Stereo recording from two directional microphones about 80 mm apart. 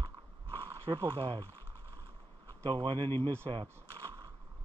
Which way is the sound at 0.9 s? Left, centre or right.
Right.